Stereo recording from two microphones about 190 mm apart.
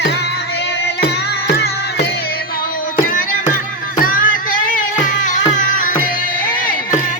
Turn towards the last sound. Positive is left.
turn(degrees=45)  # may be behind; listen again after turning